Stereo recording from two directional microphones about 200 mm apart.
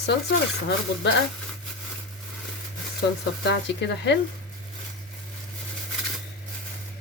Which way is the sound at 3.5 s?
60° left (ahead or behind).